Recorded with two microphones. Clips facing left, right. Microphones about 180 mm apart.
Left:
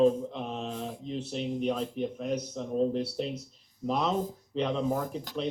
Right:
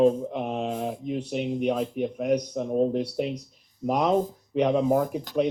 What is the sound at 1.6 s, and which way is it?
Speech, 70° right (ahead or behind).